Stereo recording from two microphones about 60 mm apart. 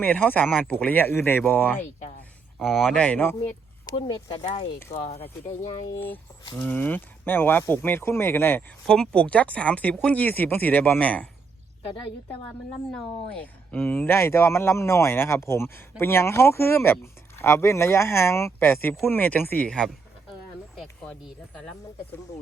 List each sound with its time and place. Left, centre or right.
0.0 s speech: left
2.6 s speech: centre
2.9 s speech: left
3.9 s speech: left
6.6 s speech: left
8.9 s speech: centre
13.3 s speech: left
19.6 s speech: centre
21.0 s speech: left